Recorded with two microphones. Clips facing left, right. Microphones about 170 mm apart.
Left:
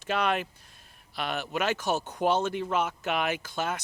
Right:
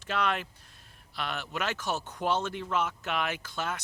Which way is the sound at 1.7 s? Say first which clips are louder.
Left 4 dB; 45° left (ahead or behind).